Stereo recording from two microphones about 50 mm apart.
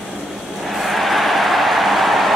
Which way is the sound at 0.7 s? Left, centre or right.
Centre.